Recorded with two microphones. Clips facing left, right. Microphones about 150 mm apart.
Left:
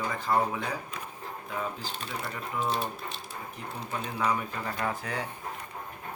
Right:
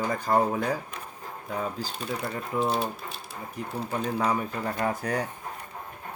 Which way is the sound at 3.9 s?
40° right (ahead or behind).